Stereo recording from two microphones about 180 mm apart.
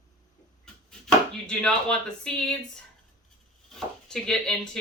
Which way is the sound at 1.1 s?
5° left (ahead or behind).